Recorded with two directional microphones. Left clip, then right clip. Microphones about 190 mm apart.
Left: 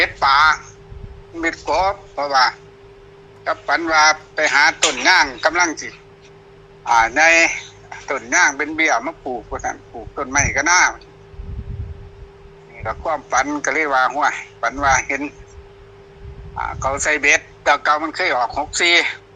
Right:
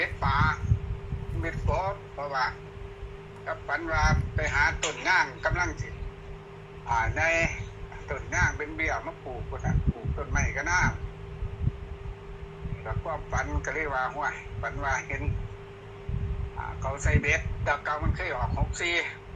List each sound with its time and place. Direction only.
0.0 s a man's voice: 65° left (ahead or behind)
12.8 s a man's voice: 70° left (ahead or behind)
16.6 s a man's voice: 65° left (ahead or behind)